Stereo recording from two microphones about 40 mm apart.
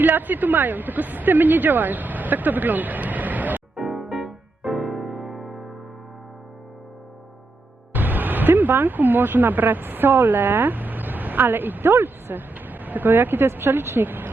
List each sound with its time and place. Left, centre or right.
0.0 s speech: right
3.8 s music: centre
7.9 s speech: right
14.0 s speech: right